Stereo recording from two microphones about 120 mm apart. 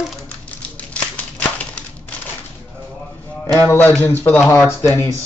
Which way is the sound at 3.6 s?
20° left (ahead or behind).